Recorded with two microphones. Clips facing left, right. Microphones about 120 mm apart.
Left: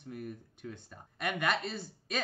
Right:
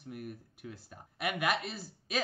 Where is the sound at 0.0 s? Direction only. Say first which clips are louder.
Left 1 dB; 5° right (ahead or behind).